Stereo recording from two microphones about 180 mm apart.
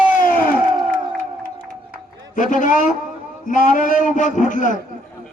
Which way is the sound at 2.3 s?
45° left (ahead or behind).